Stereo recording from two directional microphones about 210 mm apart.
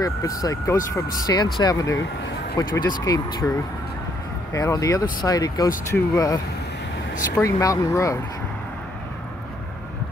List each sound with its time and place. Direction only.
0.0 s speech: 15° left (ahead or behind)